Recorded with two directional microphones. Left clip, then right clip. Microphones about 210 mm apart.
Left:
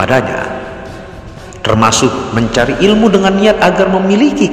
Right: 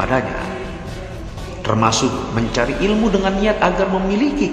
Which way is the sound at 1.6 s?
35° left (ahead or behind).